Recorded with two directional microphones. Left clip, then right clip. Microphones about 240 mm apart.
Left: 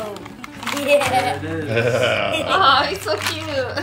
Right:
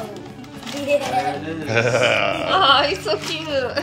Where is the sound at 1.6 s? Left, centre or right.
Centre.